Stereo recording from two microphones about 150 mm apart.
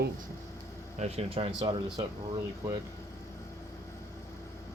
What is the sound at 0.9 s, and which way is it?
Speech, 45° right (ahead or behind).